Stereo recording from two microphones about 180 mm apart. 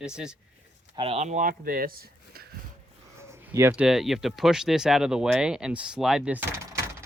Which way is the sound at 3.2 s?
15° right (ahead or behind).